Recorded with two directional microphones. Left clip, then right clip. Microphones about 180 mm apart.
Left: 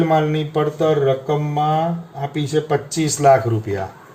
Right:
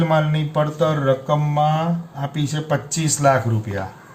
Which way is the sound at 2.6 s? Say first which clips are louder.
Left 3 dB; 20° left (ahead or behind).